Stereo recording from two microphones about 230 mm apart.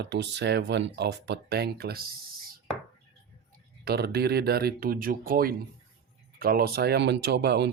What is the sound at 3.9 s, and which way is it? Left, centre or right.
Speech, right.